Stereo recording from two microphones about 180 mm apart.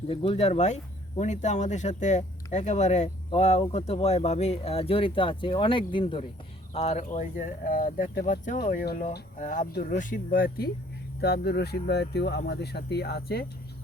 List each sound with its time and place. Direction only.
0.1 s speech: 30° left (ahead or behind); by 10.7 s 55° left (ahead or behind)
11.2 s speech: 65° left (ahead or behind)